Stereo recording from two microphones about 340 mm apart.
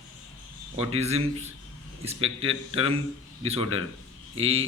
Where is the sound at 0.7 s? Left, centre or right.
Centre.